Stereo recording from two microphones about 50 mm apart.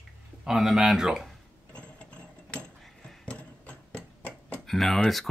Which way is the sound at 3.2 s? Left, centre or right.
Left.